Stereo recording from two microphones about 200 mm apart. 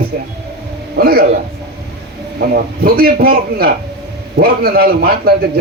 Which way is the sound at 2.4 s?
50° right (ahead or behind).